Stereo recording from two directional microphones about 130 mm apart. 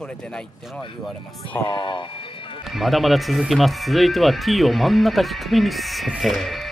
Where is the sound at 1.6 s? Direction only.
40° left (ahead or behind).